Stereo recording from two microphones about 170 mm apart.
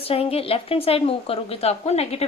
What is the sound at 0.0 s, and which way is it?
A woman's voice, 35° left (ahead or behind).